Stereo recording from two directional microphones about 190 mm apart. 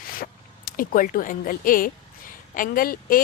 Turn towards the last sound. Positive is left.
turn(degrees=50)  # may be behind; listen again after turning